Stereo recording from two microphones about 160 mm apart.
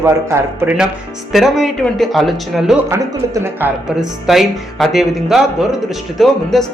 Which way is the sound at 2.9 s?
15° right (ahead or behind).